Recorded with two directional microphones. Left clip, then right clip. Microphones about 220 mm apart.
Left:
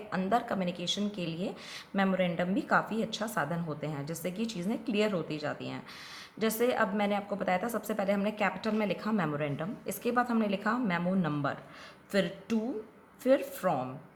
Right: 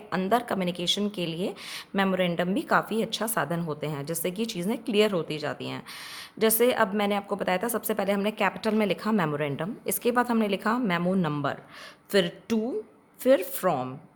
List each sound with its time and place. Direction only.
0.1 s a woman's voice: 50° right (ahead or behind)